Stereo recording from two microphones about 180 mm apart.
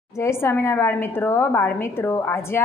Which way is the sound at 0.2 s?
15° left (ahead or behind).